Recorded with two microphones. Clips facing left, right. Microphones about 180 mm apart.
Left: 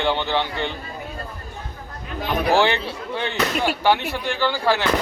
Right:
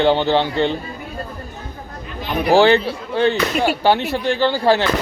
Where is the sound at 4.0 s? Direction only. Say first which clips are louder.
Right 6 dB; 15° left (ahead or behind).